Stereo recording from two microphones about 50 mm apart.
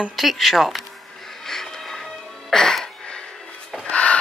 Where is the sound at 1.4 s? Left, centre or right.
Centre.